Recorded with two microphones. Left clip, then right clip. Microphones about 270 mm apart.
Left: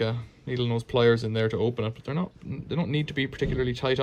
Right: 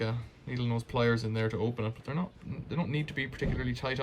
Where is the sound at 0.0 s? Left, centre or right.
Centre.